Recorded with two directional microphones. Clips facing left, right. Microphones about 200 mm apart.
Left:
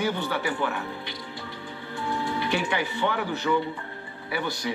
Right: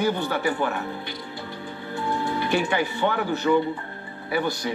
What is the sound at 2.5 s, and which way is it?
Speech, 45° right (ahead or behind).